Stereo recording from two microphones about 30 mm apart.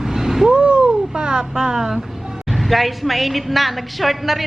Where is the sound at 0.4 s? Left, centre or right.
Right.